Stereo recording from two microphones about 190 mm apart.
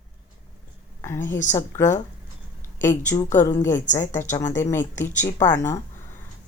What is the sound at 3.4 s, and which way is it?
Speech, 15° left (ahead or behind).